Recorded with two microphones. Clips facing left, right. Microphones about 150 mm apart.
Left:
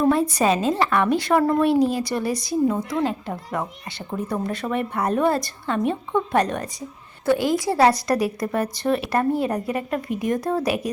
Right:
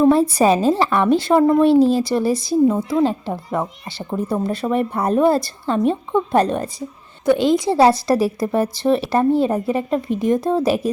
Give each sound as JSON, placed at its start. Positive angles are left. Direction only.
{"t": 0.0, "sound": "a woman's voice", "side_deg": -30}